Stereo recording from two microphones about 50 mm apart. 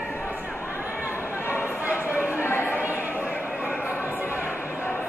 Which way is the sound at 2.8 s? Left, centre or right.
Right.